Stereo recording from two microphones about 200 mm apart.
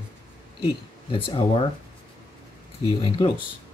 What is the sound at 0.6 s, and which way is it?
Speech, 25° left (ahead or behind).